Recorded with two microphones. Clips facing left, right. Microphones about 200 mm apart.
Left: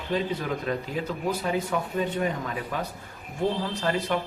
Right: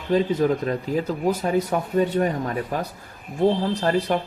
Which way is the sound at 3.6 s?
35° right (ahead or behind).